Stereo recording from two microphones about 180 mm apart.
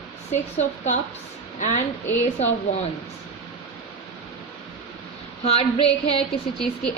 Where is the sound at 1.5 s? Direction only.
40° left (ahead or behind).